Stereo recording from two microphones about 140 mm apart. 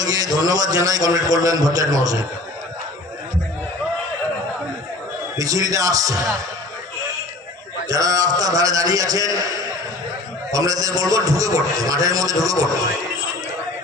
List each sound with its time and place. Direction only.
0.0 s a man's voice: 25° right (ahead or behind)
5.4 s a man's voice: 25° right (ahead or behind)
7.9 s a man's voice: 25° right (ahead or behind)